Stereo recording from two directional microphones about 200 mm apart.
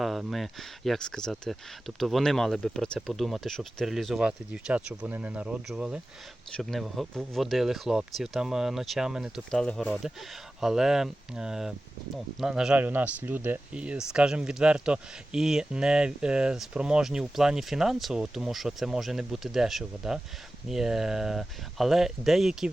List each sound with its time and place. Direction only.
0.0 s speech: centre (ahead or behind)